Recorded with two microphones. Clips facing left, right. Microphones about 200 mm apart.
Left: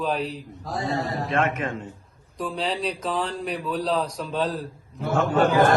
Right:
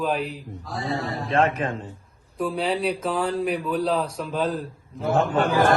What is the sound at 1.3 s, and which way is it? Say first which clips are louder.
Speech: right 4 dB; 35° right (ahead or behind).